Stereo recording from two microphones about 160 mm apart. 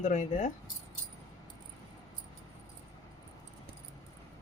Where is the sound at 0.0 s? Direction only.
45° left (ahead or behind).